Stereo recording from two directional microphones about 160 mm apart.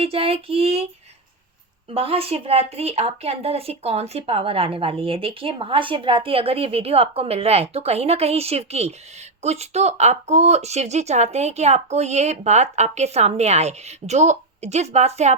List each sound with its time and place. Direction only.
0.0 s speech: 40° right (ahead or behind)
1.9 s speech: 35° right (ahead or behind)